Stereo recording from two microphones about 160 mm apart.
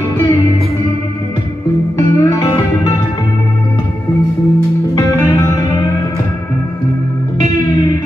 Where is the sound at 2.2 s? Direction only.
20° left (ahead or behind).